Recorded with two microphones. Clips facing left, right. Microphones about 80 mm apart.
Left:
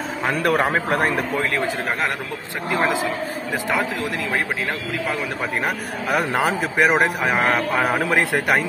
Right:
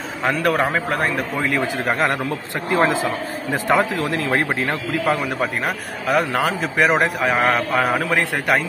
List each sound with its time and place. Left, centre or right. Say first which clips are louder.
0.2 s a man's voice: right 1 dB; centre
0.7 s a man's voice: left 1 dB; left
2.7 s a man's voice: right 3 dB; right
6.0 s a man's voice: right 1 dB; centre
6.8 s a man's voice: right 1 dB; centre
7.9 s a man's voice: left 1 dB; centre